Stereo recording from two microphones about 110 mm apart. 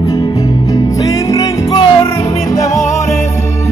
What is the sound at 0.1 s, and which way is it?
Music, 30° left (ahead or behind).